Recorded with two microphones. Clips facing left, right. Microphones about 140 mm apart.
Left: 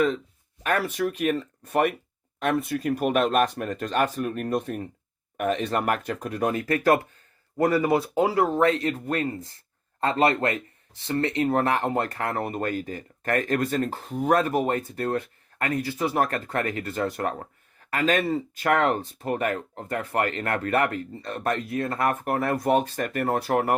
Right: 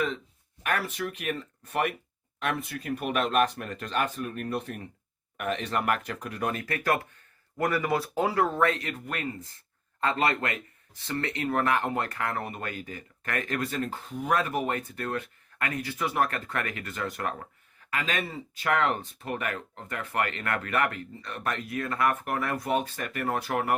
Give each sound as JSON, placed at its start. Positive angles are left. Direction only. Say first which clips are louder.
{"t": 0.6, "sound": "speech", "louder": "left 5 dB", "side_deg": 35}